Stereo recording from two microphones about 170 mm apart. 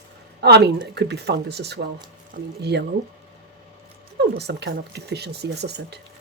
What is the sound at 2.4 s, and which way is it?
Speech, 55° right (ahead or behind).